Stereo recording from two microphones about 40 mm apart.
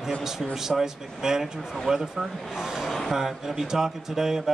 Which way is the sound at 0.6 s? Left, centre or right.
Centre.